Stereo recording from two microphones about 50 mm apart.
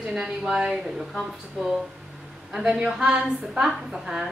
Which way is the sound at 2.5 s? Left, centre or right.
Centre.